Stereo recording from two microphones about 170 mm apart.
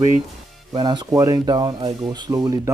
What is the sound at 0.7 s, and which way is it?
Speech, 25° right (ahead or behind).